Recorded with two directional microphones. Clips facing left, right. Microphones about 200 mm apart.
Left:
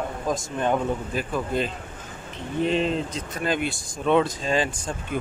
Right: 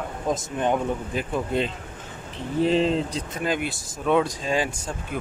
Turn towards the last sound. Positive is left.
turn(degrees=-10)  # may be behind; listen again after turning